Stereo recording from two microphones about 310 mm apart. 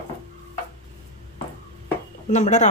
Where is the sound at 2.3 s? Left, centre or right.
Left.